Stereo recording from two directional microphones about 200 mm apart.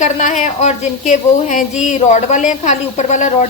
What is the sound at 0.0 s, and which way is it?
A woman's voice, 40° left (ahead or behind).